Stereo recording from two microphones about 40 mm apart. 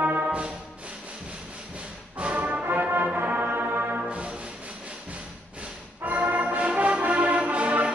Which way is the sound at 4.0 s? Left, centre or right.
Right.